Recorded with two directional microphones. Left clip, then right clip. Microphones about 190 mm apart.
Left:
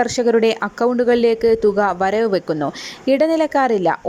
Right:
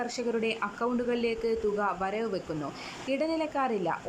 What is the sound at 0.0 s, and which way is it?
A woman's voice, 40° left (ahead or behind).